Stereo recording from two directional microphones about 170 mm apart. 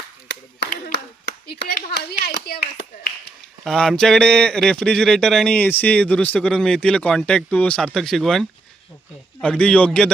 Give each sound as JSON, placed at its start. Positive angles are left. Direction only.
{"t": 0.3, "sound": "clapping", "side_deg": 85}
{"t": 2.2, "sound": "speech", "side_deg": 65}
{"t": 3.6, "sound": "a man's voice", "side_deg": 0}